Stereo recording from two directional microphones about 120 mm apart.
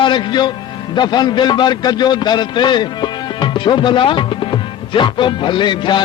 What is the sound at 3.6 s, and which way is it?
Music, 40° left (ahead or behind).